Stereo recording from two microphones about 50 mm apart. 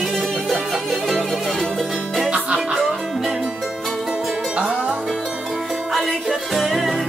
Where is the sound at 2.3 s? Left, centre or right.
Centre.